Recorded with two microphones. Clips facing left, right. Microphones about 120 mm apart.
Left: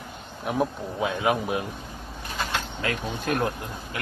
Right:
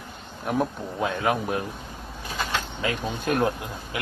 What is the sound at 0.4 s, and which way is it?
A man's voice, centre (ahead or behind).